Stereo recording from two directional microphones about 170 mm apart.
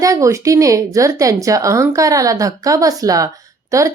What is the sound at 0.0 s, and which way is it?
Speech, 20° right (ahead or behind).